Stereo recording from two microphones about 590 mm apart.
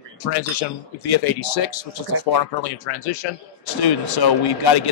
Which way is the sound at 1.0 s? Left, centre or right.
Left.